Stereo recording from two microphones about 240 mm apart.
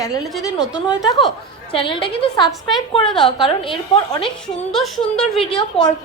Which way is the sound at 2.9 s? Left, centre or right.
Left.